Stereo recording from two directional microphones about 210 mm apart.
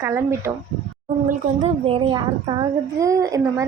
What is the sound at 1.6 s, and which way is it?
A woman's voice, 25° right (ahead or behind).